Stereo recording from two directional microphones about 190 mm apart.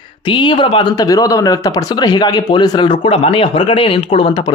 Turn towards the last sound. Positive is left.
turn(degrees=25)  # may be behind; listen again after turning